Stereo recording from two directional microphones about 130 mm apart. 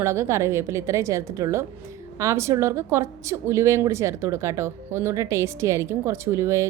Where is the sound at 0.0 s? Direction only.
20° right (ahead or behind).